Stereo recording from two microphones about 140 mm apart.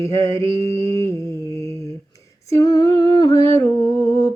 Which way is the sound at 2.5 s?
20° left (ahead or behind).